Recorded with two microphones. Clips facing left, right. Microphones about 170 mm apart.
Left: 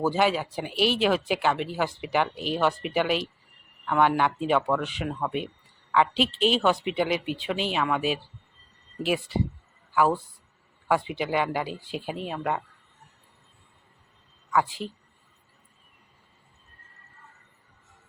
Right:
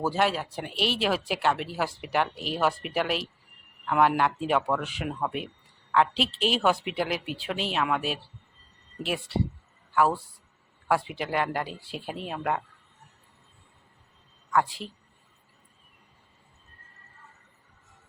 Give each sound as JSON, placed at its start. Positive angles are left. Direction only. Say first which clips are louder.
{"t": 0.0, "sound": "speech", "louder": "left 2 dB", "side_deg": 0}
{"t": 9.9, "sound": "speech", "louder": "left 1 dB", "side_deg": 0}
{"t": 14.5, "sound": "speech", "louder": "left 1 dB", "side_deg": 0}